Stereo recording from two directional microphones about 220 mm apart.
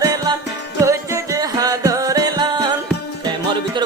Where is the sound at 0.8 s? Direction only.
15° right (ahead or behind).